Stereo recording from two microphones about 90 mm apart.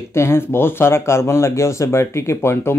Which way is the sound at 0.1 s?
30° left (ahead or behind).